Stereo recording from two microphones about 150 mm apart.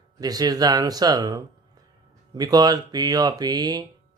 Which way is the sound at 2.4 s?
25° right (ahead or behind).